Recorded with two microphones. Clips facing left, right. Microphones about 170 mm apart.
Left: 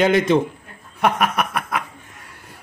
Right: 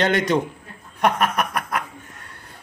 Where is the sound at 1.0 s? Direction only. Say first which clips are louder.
Left 1 dB; 5° left (ahead or behind).